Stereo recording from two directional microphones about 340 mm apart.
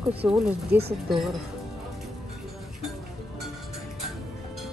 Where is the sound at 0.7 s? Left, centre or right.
Right.